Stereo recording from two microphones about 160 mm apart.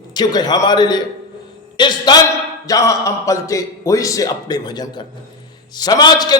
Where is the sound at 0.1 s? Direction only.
25° left (ahead or behind).